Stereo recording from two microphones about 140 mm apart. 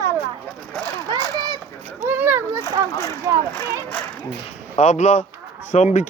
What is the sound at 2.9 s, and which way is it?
Speech, 25° left (ahead or behind).